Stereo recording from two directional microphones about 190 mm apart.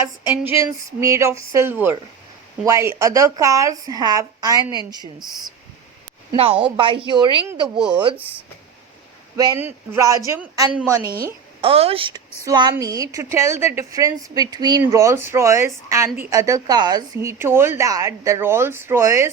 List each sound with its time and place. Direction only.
0.4 s a woman's voice: 15° right (ahead or behind)
6.3 s a woman's voice: 30° right (ahead or behind)
7.8 s a woman's voice: 5° right (ahead or behind)
9.3 s a woman's voice: 20° right (ahead or behind)
11.6 s a woman's voice: 30° right (ahead or behind); by 19.3 s 15° right (ahead or behind)